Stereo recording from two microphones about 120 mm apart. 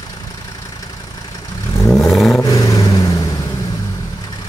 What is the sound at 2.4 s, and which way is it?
Vehicle, 30° left (ahead or behind).